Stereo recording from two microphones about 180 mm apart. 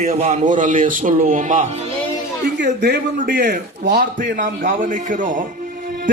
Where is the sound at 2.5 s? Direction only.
70° right (ahead or behind).